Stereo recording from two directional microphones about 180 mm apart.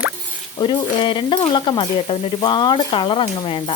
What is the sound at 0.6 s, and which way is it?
Speech, 25° left (ahead or behind).